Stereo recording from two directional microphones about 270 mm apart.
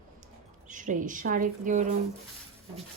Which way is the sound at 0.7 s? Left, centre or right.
Right.